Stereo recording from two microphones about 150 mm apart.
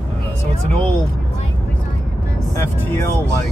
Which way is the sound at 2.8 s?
20° left (ahead or behind).